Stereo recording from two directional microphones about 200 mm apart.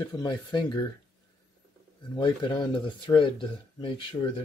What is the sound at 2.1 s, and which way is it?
Speech, 25° left (ahead or behind).